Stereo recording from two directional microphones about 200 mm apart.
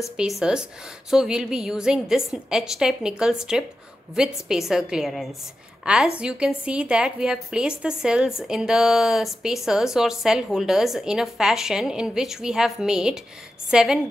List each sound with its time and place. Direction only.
0.2 s a woman's voice: 5° right (ahead or behind)